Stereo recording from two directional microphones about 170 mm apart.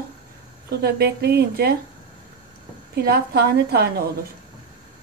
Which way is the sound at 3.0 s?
65° right (ahead or behind).